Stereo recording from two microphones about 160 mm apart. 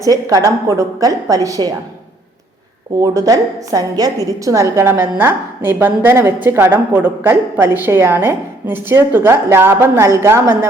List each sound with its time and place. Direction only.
0.1 s a woman's voice: 20° right (ahead or behind)
3.0 s a woman's voice: 20° right (ahead or behind)